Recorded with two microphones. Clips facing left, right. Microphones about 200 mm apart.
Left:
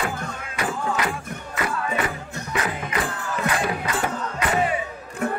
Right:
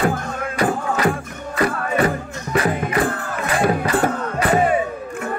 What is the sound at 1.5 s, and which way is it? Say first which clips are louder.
Music: right 7 dB; 40° right (ahead or behind).